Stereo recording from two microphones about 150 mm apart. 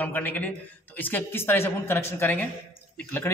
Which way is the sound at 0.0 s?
10° left (ahead or behind).